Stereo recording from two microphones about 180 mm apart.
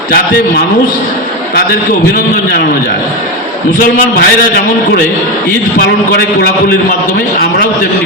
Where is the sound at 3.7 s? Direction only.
50° left (ahead or behind).